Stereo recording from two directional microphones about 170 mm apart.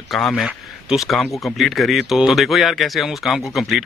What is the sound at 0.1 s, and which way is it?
Speech, centre (ahead or behind).